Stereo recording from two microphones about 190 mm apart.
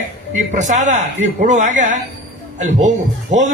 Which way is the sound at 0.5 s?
40° right (ahead or behind).